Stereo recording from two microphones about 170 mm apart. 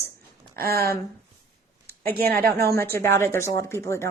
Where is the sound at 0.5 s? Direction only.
65° right (ahead or behind).